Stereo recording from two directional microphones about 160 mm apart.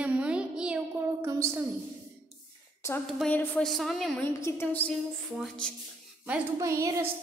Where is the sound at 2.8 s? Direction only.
20° left (ahead or behind).